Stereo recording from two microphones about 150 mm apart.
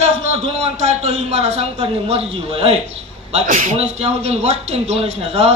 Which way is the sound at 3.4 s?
55° right (ahead or behind).